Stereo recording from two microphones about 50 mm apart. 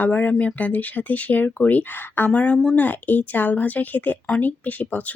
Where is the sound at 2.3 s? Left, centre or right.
Left.